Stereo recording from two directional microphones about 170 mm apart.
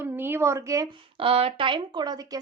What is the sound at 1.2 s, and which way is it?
Speech, 35° right (ahead or behind).